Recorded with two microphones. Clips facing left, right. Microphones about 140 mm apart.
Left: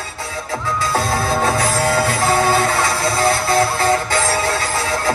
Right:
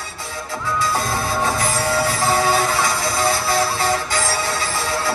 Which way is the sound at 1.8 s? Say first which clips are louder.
Left 1 dB; 60° left (ahead or behind).